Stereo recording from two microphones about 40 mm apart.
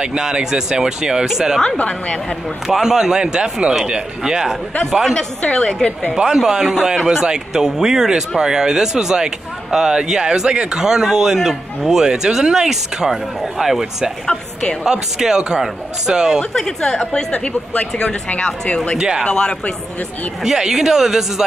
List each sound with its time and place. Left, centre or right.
0.0 s speech: right
1.9 s speech: left
2.7 s speech: centre
5.1 s speech: left
6.1 s speech: centre
14.2 s a woman's voice: centre
14.9 s speech: centre
16.5 s a woman's voice: centre
17.3 s speech: left
18.9 s speech: centre
19.2 s speech: centre
20.4 s speech: centre